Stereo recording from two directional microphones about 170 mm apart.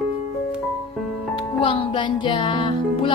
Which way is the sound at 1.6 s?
30° left (ahead or behind).